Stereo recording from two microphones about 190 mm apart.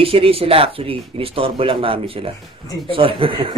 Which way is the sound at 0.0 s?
30° right (ahead or behind).